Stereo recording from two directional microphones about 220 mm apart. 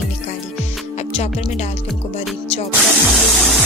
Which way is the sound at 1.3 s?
30° left (ahead or behind).